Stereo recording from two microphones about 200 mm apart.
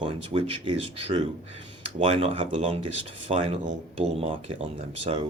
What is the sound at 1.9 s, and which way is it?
Speech, 30° right (ahead or behind).